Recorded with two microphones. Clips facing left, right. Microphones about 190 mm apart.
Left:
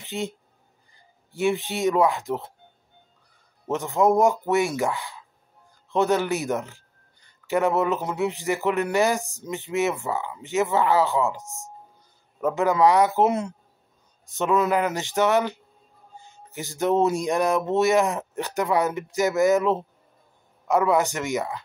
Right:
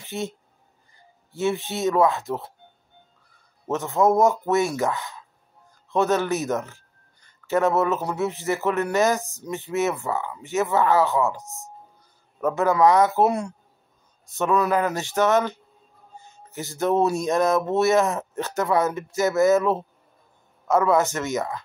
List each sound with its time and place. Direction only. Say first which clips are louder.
0.0 s speech: even; 15° left (ahead or behind)
1.3 s speech: left 1 dB; 15° left (ahead or behind)
3.6 s speech: even; 15° left (ahead or behind)